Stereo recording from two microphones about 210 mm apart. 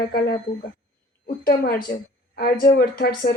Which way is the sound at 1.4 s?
45° left (ahead or behind).